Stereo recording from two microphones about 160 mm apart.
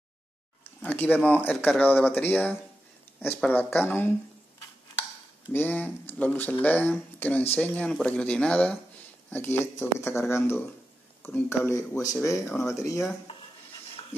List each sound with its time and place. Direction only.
0.7 s speech: 10° left (ahead or behind)
5.5 s speech: 10° left (ahead or behind)